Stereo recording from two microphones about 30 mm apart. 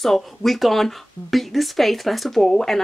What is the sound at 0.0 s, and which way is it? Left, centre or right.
Speech, centre.